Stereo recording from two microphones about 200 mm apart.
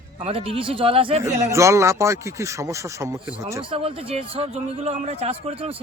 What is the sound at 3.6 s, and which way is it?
A man's voice, 25° right (ahead or behind).